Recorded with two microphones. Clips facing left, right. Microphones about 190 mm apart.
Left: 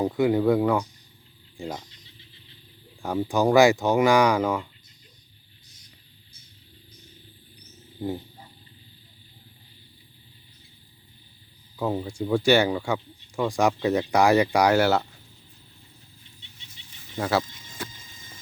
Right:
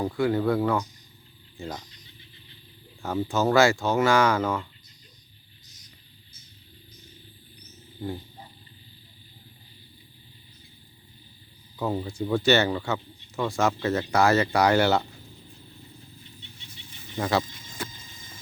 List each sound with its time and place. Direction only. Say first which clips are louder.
0.0 s speech: left 3 dB; 20° left (ahead or behind)
3.0 s speech: left 2 dB; 15° left (ahead or behind)
8.0 s a sound: left 3 dB; 20° left (ahead or behind)
11.8 s speech: left 1 dB; 10° left (ahead or behind)
17.2 s speech: left 1 dB; 5° left (ahead or behind)